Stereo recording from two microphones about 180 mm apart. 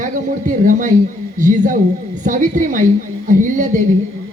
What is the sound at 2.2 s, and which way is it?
A woman's voice, 45° right (ahead or behind).